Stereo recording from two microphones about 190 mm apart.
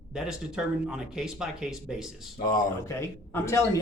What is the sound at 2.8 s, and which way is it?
Speech, 15° left (ahead or behind).